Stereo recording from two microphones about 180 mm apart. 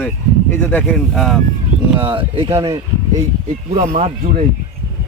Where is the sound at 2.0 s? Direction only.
30° right (ahead or behind).